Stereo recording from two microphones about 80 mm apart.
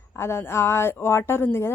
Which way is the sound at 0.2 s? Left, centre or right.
Left.